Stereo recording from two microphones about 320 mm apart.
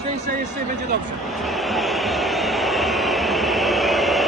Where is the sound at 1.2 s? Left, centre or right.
Centre.